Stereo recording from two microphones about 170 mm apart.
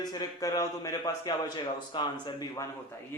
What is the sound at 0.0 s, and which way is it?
A man's voice, 25° left (ahead or behind).